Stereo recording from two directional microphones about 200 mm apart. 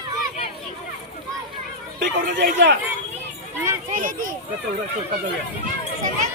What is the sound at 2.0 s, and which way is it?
Speech, 55° right (ahead or behind).